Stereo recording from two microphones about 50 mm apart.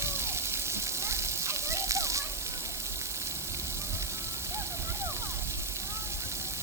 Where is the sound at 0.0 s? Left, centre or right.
Right.